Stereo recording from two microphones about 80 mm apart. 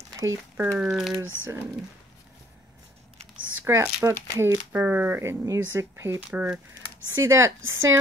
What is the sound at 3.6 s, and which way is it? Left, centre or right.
Speech, right.